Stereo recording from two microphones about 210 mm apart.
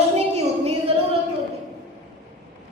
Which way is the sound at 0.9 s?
25° right (ahead or behind).